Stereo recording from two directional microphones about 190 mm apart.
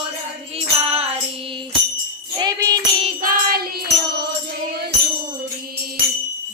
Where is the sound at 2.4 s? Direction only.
20° right (ahead or behind).